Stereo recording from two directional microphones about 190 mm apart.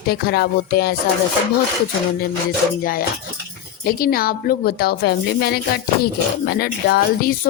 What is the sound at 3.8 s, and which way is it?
A woman's voice, 50° left (ahead or behind).